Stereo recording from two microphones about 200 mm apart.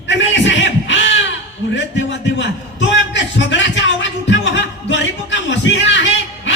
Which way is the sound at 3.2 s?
65° left (ahead or behind).